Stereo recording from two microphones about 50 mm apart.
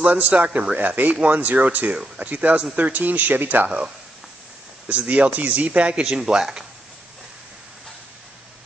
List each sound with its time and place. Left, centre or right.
0.0 s a man's voice: right
6.0 s speech: centre